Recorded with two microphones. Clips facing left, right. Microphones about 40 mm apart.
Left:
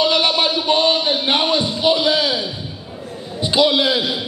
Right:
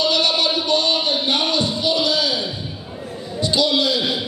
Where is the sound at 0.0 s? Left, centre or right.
Left.